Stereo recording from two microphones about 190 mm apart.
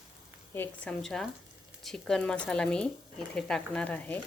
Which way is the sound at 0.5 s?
10° left (ahead or behind).